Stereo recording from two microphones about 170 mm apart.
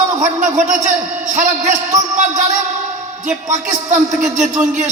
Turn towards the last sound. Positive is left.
turn(degrees=-45)  # may be behind; listen again after turning